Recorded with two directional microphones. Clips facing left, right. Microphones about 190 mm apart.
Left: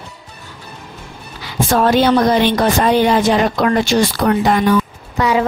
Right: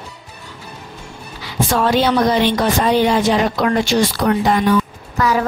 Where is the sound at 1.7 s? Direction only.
45° left (ahead or behind).